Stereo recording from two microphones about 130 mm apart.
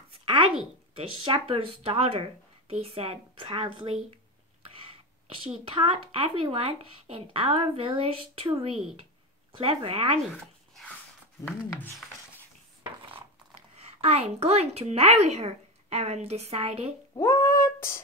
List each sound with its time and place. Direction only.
0.9 s speech: 40° right (ahead or behind)
5.7 s speech: 40° right (ahead or behind)
10.3 s a sound: 5° left (ahead or behind)
11.4 s speech: 15° left (ahead or behind)
13.7 s a woman's voice: 55° right (ahead or behind)
17.2 s cat: 20° left (ahead or behind)